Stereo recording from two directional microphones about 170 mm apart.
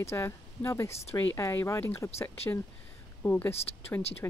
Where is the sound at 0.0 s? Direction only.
15° left (ahead or behind).